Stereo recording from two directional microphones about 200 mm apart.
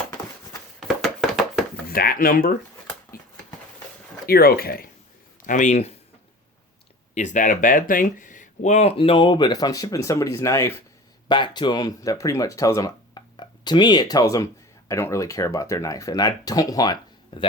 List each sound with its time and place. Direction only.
0.8 s a sound: centre (ahead or behind)
1.9 s speech: 45° left (ahead or behind)
4.3 s speech: 50° left (ahead or behind)
5.5 s speech: 35° left (ahead or behind)
7.1 s speech: 35° left (ahead or behind); by 17.5 s 20° left (ahead or behind)